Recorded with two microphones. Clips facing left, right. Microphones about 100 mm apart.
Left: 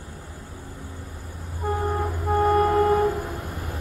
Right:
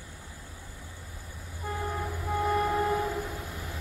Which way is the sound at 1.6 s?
55° left (ahead or behind).